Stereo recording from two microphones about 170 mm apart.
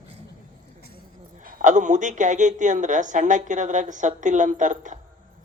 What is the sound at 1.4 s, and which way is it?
Speech, 50° right (ahead or behind).